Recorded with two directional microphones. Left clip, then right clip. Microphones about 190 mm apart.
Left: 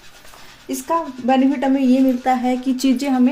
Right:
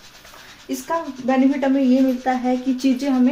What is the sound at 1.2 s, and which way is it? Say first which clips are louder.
Speech: even; 65° left (ahead or behind).